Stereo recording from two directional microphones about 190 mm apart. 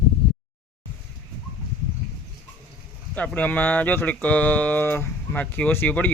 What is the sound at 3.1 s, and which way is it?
Speech, 10° left (ahead or behind).